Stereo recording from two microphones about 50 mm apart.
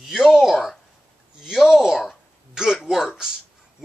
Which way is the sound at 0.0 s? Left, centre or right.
Centre.